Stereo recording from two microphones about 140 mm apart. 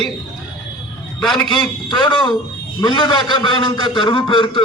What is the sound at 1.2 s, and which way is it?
Speech, centre (ahead or behind).